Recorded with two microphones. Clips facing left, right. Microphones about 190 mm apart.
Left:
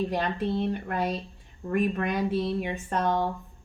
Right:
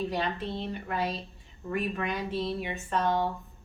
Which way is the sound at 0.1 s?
45° left (ahead or behind).